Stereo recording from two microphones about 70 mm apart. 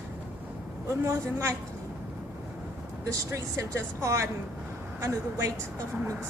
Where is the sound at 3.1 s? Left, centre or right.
Right.